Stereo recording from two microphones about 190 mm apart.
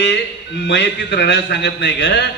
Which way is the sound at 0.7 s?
65° left (ahead or behind).